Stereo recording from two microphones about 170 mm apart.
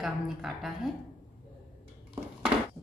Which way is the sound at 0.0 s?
Centre (ahead or behind).